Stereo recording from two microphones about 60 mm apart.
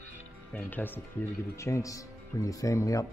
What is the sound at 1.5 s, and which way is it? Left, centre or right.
Speech, left.